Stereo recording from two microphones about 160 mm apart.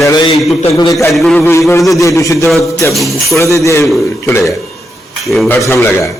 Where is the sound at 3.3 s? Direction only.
20° left (ahead or behind).